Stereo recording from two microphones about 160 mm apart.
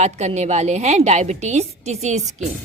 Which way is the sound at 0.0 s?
45° right (ahead or behind).